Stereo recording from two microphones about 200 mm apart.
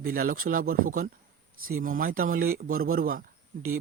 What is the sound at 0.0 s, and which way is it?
A man's voice, 45° right (ahead or behind).